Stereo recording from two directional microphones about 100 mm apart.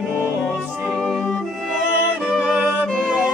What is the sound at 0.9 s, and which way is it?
Music, centre (ahead or behind).